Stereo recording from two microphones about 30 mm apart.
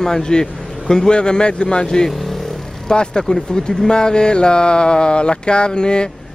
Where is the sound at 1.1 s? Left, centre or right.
Left.